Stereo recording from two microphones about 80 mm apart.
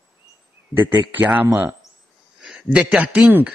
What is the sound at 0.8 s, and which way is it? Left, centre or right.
Speech, right.